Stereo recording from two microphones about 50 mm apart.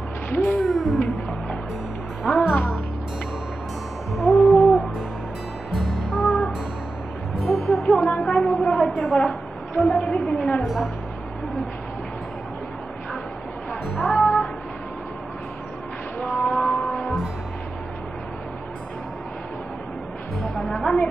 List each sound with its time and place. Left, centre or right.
0.3 s speech: left
0.6 s speech: centre
0.9 s music: centre
2.2 s speech: centre
4.1 s hoot: centre
5.8 s music: centre
8.3 s a sound: centre
9.0 s a sound: centre
9.8 s a woman's voice: centre
10.6 s speech: centre
13.8 s music: centre
16.2 s a sound: centre
20.5 s a woman's voice: centre